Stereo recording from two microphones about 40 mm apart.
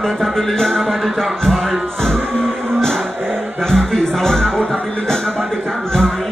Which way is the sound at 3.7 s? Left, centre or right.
Centre.